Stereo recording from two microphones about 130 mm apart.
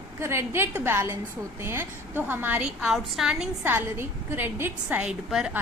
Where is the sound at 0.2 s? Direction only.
20° right (ahead or behind); by 3.5 s 5° right (ahead or behind).